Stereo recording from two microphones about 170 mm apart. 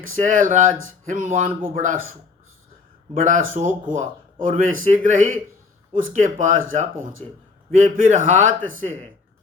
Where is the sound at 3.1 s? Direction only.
50° right (ahead or behind).